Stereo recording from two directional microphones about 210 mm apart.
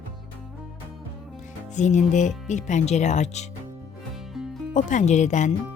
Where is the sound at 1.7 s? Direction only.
35° left (ahead or behind).